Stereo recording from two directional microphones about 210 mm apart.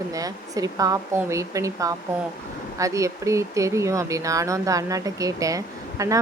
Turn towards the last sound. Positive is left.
turn(degrees=-15)  # may be behind; listen again after turning